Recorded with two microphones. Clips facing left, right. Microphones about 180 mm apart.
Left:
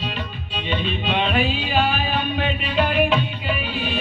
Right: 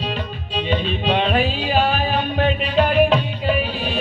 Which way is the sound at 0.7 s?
35° right (ahead or behind).